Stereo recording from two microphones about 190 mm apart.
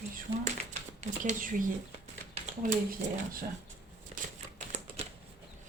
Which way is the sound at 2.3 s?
45° right (ahead or behind).